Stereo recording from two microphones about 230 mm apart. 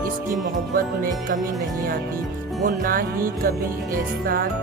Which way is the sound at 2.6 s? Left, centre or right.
Right.